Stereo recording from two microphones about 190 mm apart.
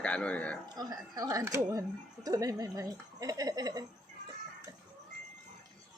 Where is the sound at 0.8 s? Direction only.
20° right (ahead or behind).